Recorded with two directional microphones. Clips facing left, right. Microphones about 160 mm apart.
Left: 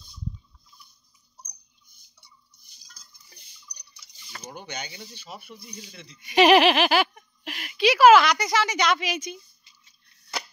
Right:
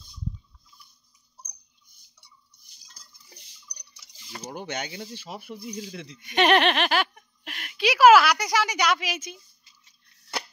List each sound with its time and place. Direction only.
2.9 s a sound: 25° right (ahead or behind)
4.4 s speech: 90° right
6.2 s giggle: 5° left (ahead or behind)
7.8 s speech: 10° right (ahead or behind)